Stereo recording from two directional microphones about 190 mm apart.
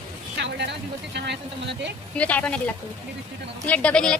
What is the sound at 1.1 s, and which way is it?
Speech, 65° right (ahead or behind).